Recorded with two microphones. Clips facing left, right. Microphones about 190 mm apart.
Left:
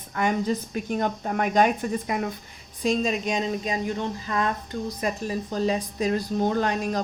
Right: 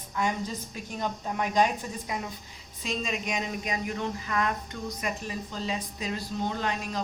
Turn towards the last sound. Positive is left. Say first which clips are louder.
# left 7 dB
turn(degrees=45)  # may be behind; listen again after turning